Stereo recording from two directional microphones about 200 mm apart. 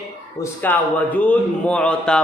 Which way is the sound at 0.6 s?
10° left (ahead or behind).